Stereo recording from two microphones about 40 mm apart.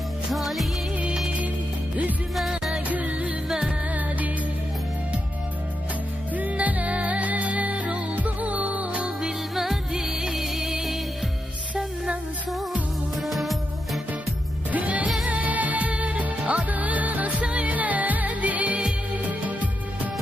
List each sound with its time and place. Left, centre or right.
0.3 s music: centre
2.9 s music: right
6.3 s music: right
9.6 s music: centre
13.2 s music: centre
14.7 s music: right